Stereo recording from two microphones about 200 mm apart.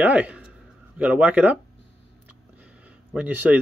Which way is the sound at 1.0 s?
5° right (ahead or behind).